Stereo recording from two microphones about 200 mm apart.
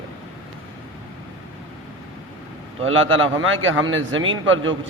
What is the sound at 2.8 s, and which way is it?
A man's voice, 80° right.